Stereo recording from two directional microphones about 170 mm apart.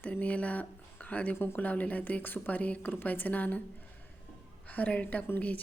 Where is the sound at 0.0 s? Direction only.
10° left (ahead or behind).